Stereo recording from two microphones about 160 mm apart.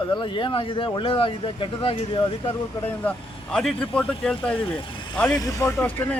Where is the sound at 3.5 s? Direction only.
5° left (ahead or behind).